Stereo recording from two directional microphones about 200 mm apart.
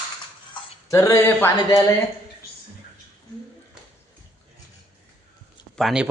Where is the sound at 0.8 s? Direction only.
15° left (ahead or behind).